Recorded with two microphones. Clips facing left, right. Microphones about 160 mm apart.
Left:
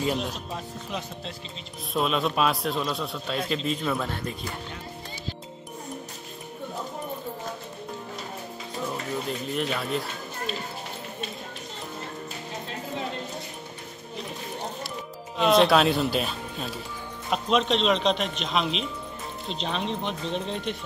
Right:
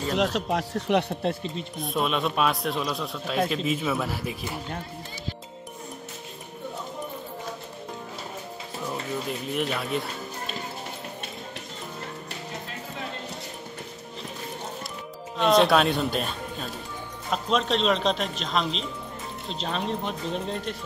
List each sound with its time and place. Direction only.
0.1 s speech: 90° right; by 1.9 s 55° right (ahead or behind)
2.0 s a man's voice: centre (ahead or behind)
9.5 s a man's voice: centre (ahead or behind)
15.3 s a man's voice: centre (ahead or behind)